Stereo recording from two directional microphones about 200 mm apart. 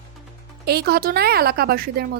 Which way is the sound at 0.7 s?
50° right (ahead or behind).